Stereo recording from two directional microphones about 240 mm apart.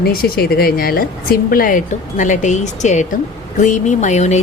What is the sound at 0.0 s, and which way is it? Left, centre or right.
Speech, left.